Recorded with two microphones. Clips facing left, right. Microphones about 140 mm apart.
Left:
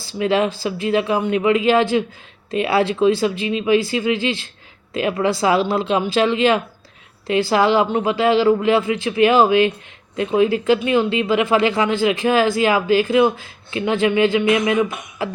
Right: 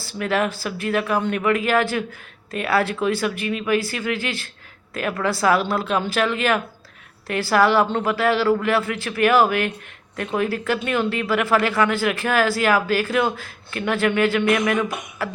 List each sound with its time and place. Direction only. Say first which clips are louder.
0.2 s speech: left 4 dB; 20° left (ahead or behind)